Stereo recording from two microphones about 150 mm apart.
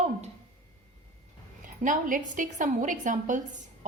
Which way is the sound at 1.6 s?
60° right (ahead or behind).